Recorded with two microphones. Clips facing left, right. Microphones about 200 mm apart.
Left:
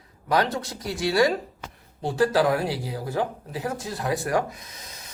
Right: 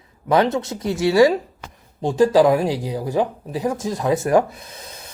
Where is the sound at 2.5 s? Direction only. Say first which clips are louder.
Right 6 dB; 15° right (ahead or behind).